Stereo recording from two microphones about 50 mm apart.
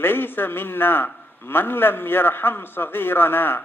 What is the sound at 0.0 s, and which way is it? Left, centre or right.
A man's voice, left.